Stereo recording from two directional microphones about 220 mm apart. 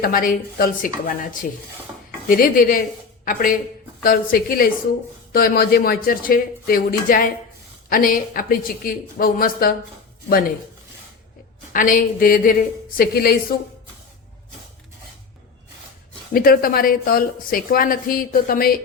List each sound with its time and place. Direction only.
0.0 s a woman's voice: 40° left (ahead or behind)
11.7 s a woman's voice: 40° left (ahead or behind)
16.3 s a woman's voice: 40° left (ahead or behind)